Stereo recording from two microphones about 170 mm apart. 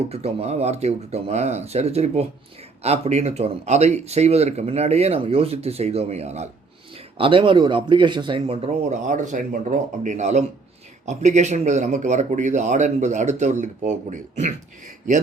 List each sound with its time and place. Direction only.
0.1 s speech: 35° right (ahead or behind)
9.0 s speech: 50° right (ahead or behind)